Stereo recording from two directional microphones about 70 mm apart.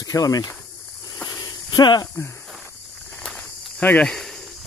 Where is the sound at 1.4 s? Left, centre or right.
Left.